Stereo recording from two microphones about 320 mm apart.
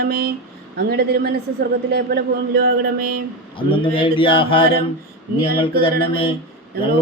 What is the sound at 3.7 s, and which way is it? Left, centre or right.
Mantra, centre.